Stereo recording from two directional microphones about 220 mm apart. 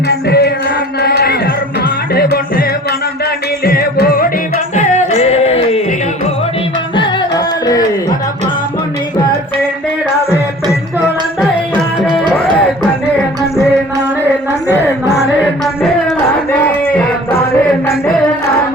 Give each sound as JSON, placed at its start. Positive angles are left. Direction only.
{"t": 0.1, "sound": "music", "side_deg": 50}
{"t": 3.6, "sound": "music", "side_deg": 45}
{"t": 6.9, "sound": "music", "side_deg": 20}
{"t": 10.7, "sound": "music", "side_deg": 0}
{"t": 15.6, "sound": "a sound", "side_deg": 0}
{"t": 16.6, "sound": "a sound", "side_deg": 10}
{"t": 17.8, "sound": "music", "side_deg": 10}